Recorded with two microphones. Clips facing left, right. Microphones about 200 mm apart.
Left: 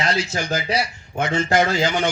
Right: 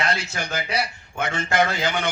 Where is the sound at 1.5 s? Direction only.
60° right (ahead or behind).